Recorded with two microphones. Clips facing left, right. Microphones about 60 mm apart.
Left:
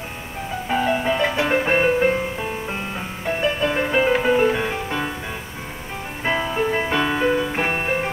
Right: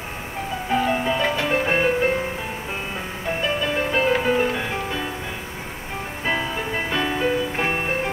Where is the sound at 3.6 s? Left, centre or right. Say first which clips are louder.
Left 2 dB; centre.